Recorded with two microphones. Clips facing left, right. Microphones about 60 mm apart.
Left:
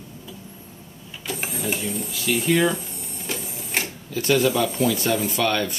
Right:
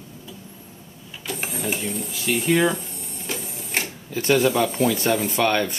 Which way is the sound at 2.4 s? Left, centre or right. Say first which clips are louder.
Right 1 dB; centre.